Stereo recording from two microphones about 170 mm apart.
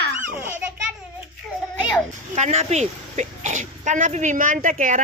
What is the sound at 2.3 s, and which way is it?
Speech, 40° right (ahead or behind).